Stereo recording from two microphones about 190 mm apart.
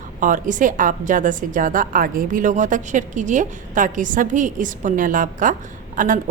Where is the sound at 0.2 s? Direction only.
45° right (ahead or behind).